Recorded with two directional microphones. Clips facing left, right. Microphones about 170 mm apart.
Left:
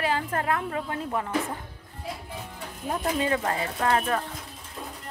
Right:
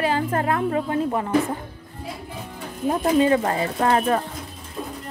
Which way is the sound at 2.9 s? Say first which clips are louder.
Right 8 dB; 30° right (ahead or behind).